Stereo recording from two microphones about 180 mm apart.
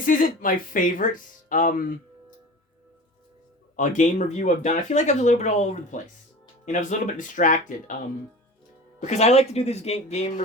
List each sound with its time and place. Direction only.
0.0 s speech: 50° left (ahead or behind)
3.8 s speech: 45° left (ahead or behind)
9.0 s speech: 40° left (ahead or behind)